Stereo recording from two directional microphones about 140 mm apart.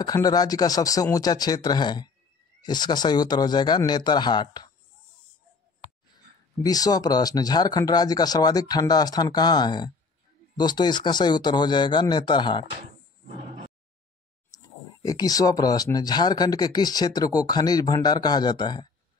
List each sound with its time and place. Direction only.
0.0 s speech: 25° left (ahead or behind)
6.1 s speech: 25° left (ahead or behind)
14.5 s speech: 25° left (ahead or behind)